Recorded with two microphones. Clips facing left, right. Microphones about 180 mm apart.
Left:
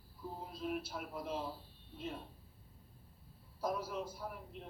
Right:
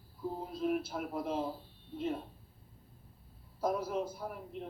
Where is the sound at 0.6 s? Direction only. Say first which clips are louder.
Right 7 dB; 50° right (ahead or behind).